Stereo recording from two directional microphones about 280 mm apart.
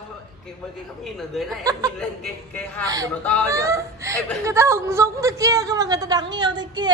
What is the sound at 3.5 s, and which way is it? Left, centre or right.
A woman's voice, centre.